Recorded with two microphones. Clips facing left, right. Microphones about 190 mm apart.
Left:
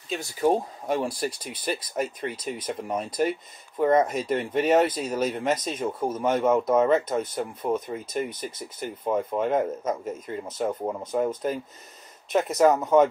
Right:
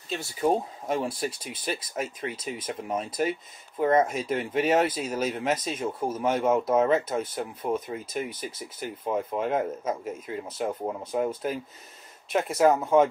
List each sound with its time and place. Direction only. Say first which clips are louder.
0.1 s speech: left 2 dB; centre (ahead or behind)
12.5 s speech: left 1 dB; 5° right (ahead or behind)